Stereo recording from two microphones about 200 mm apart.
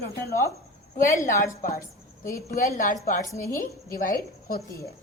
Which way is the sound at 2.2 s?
40° left (ahead or behind).